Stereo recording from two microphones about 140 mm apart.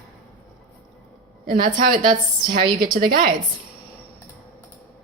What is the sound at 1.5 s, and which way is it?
A woman's voice, 85° right.